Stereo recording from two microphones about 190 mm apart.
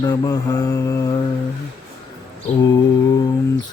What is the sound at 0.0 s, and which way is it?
Mantra, 15° left (ahead or behind).